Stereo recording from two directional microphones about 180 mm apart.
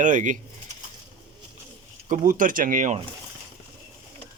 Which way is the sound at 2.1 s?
50° right (ahead or behind).